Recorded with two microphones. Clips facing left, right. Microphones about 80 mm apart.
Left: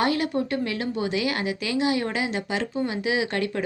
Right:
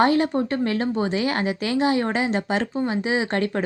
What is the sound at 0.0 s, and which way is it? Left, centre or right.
Speech, right.